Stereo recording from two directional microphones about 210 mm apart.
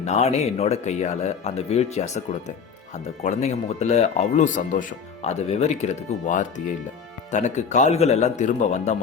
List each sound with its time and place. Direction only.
0.0 s speech: 30° left (ahead or behind)